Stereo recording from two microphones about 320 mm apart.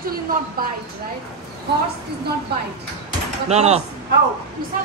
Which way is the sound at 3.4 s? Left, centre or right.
Right.